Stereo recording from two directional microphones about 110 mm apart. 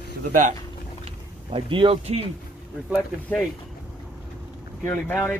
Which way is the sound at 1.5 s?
55° right (ahead or behind).